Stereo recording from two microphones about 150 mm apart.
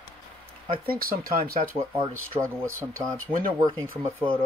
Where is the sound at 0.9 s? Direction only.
80° right.